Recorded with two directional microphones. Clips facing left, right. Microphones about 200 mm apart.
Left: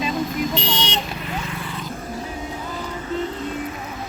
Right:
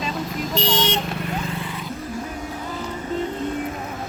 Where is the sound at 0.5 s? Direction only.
45° right (ahead or behind).